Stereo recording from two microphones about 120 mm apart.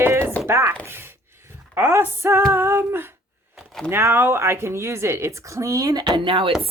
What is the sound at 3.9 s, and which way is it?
A woman's voice, 20° right (ahead or behind).